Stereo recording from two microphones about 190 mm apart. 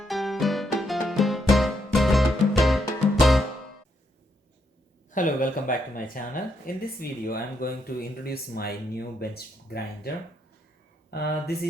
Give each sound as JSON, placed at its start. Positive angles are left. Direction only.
{"t": 0.0, "sound": "music", "side_deg": 0}
{"t": 5.1, "sound": "speech", "side_deg": 45}
{"t": 11.1, "sound": "speech", "side_deg": 55}